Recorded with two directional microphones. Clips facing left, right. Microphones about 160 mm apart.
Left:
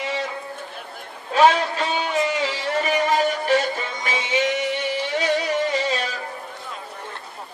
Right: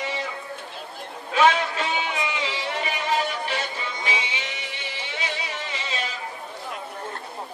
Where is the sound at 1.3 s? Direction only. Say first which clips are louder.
Left 3 dB; 35° left (ahead or behind).